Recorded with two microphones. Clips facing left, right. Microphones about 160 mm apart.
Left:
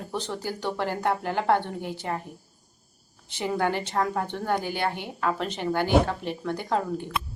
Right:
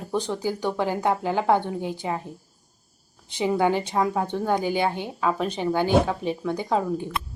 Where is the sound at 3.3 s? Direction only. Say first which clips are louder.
Right 4 dB; 15° right (ahead or behind).